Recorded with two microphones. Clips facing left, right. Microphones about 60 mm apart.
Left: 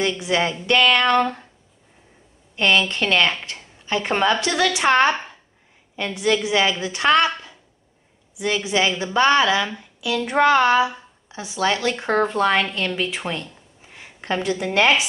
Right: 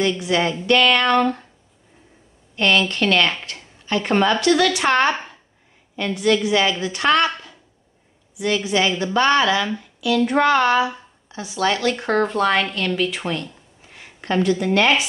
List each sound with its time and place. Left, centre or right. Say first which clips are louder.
0.2 s a woman's voice: right 1 dB; centre
2.5 s a woman's voice: even; centre
5.1 s a sound: even; centre
5.9 s a woman's voice: right 2 dB; centre
8.4 s a woman's voice: right 1 dB; centre